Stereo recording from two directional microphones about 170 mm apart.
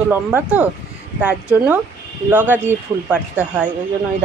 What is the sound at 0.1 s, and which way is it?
Speech, 10° right (ahead or behind).